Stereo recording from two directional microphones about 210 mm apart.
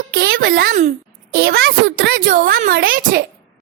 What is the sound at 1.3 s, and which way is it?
Speech, 55° right (ahead or behind).